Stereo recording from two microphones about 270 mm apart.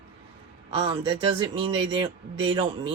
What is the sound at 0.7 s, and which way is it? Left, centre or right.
Speech, centre.